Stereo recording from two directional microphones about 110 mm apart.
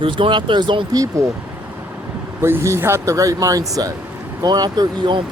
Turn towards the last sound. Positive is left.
turn(degrees=-45)  # may be behind; listen again after turning